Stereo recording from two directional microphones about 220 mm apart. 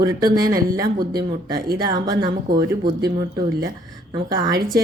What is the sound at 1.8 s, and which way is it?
Speech, 20° right (ahead or behind).